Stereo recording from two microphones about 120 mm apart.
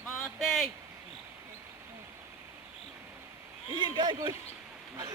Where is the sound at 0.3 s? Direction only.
Centre (ahead or behind).